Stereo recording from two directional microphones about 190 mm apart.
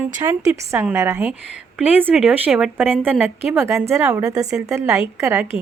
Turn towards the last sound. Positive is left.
turn(degrees=-15)  # may be behind; listen again after turning